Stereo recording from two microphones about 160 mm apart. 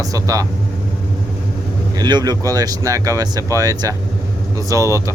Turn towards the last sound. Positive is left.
turn(degrees=-20)  # may be behind; listen again after turning